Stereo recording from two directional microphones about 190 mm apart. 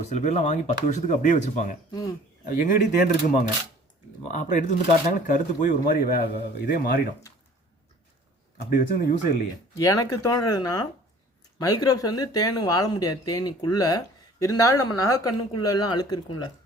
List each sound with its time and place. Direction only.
0.0 s speech: 35° left (ahead or behind)
1.9 s speech: 20° left (ahead or behind)
2.5 s a man's voice: 45° left (ahead or behind)
8.7 s a man's voice: 45° left (ahead or behind)
9.7 s speech: 20° left (ahead or behind)